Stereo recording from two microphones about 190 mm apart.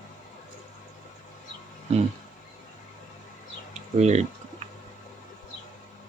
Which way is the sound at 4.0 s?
35° right (ahead or behind).